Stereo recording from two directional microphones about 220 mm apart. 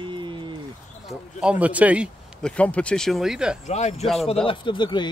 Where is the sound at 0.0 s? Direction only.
20° right (ahead or behind).